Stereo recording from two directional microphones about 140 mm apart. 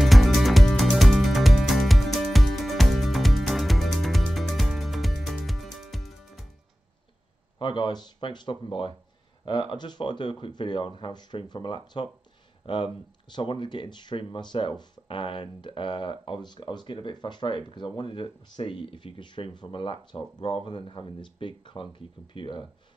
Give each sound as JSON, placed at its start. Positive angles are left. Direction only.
{"t": 0.0, "sound": "music", "side_deg": 0}
{"t": 7.5, "sound": "speech", "side_deg": 35}